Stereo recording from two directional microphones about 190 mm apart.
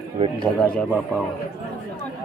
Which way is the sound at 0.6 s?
5° left (ahead or behind).